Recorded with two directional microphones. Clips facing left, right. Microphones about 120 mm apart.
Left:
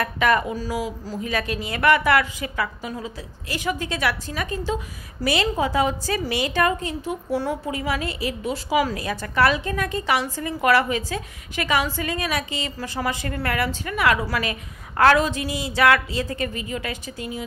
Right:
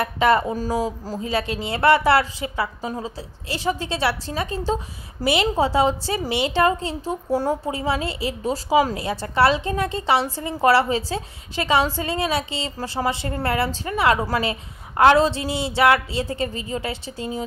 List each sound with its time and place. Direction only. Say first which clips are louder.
0.0 s a woman's voice: right 2 dB; 30° right (ahead or behind)
0.6 s speech: right 4 dB; 40° right (ahead or behind)
1.2 s a woman's voice: right 2 dB; 25° right (ahead or behind)